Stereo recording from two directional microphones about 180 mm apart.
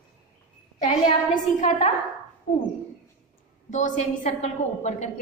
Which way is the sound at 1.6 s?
40° left (ahead or behind).